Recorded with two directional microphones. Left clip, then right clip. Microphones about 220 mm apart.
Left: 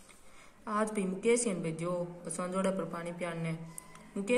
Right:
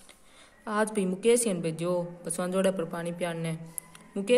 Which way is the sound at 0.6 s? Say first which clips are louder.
Right 5 dB; 40° right (ahead or behind).